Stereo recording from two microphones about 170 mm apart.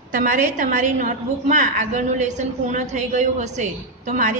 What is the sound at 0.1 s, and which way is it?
A woman's voice, 55° right (ahead or behind).